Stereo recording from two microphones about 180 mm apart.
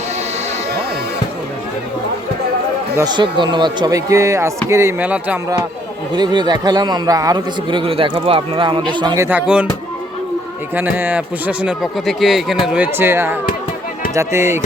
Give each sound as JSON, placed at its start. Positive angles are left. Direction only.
{"t": 2.9, "sound": "a man's voice", "side_deg": -20}
{"t": 6.1, "sound": "a man's voice", "side_deg": -25}
{"t": 10.8, "sound": "speech", "side_deg": -10}